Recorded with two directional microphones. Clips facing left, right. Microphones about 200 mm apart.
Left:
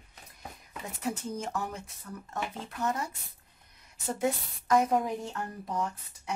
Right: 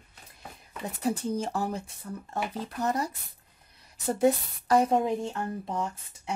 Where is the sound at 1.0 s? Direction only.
35° right (ahead or behind).